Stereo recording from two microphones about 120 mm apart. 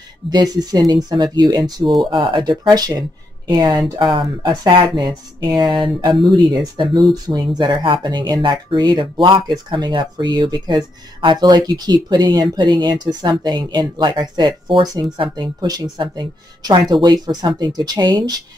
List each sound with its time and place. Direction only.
0.3 s speech: 35° right (ahead or behind)